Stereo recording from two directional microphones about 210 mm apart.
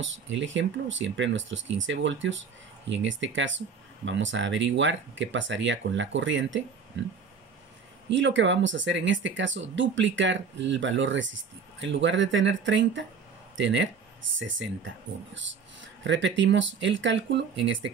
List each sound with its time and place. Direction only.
0.0 s speech: 65° right (ahead or behind)
8.1 s speech: 60° right (ahead or behind)
15.3 s speech: 60° right (ahead or behind)